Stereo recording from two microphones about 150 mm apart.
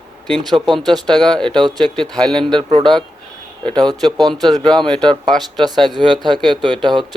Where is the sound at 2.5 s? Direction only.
30° right (ahead or behind).